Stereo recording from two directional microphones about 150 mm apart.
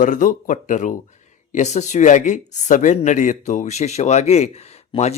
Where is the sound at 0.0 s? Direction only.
60° left (ahead or behind).